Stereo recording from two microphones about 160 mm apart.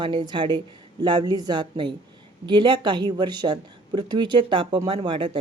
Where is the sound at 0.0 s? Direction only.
30° right (ahead or behind).